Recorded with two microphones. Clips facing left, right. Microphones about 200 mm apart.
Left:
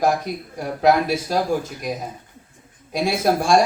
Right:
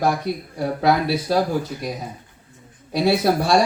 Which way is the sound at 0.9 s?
45° left (ahead or behind).